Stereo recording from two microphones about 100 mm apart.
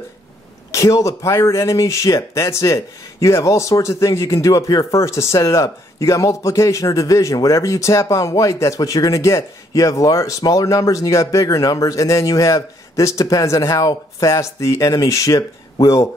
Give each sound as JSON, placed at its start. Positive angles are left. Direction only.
{"t": 0.7, "sound": "speech", "side_deg": 35}